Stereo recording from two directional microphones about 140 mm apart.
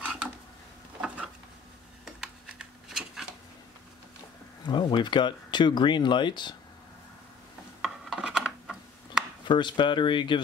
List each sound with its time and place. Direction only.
0.0 s a sound: 10° right (ahead or behind)
4.6 s speech: 35° left (ahead or behind)
7.8 s rub: 5° right (ahead or behind)
9.4 s speech: 35° left (ahead or behind)